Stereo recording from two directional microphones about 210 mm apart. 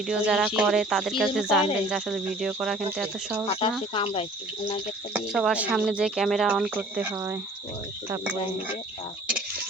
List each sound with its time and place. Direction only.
0.0 s speech: centre (ahead or behind)
3.6 s speech: 25° left (ahead or behind)
5.1 s speech: centre (ahead or behind)